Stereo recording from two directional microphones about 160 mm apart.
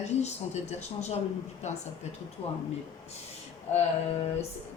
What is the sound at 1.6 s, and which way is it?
Speech, 45° left (ahead or behind).